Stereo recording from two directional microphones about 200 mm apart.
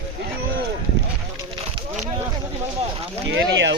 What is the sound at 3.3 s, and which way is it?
Speech, 65° right (ahead or behind).